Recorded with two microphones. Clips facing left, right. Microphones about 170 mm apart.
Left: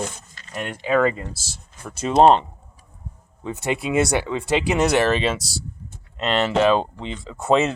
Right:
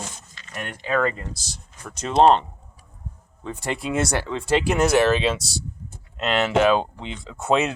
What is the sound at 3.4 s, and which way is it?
Speech, 5° left (ahead or behind).